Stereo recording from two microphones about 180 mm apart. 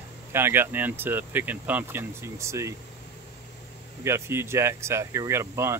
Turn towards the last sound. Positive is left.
turn(degrees=-15)  # may be behind; listen again after turning